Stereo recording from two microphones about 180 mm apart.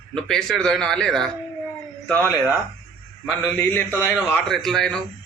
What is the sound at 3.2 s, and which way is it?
A man's voice, 10° left (ahead or behind).